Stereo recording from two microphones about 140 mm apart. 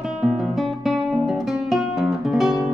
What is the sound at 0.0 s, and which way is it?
Music, 5° right (ahead or behind).